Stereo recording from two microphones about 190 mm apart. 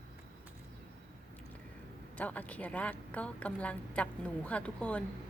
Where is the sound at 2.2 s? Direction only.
10° left (ahead or behind).